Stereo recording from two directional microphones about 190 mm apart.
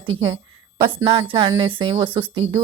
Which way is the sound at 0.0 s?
25° right (ahead or behind).